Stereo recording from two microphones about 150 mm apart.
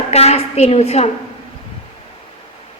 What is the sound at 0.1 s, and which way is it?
A woman's voice, 45° left (ahead or behind).